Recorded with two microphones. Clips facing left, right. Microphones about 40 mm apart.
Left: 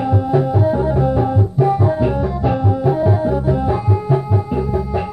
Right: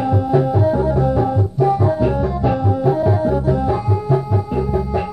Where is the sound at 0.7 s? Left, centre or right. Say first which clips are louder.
Even; centre.